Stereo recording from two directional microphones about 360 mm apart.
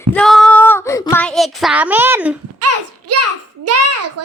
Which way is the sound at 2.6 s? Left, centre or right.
Right.